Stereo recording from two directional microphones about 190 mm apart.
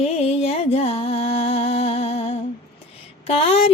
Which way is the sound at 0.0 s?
30° left (ahead or behind).